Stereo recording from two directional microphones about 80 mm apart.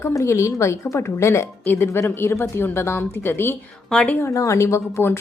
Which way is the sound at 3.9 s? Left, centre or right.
Centre.